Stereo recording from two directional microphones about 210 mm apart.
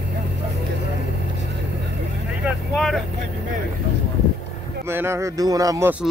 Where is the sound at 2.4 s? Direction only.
Centre (ahead or behind).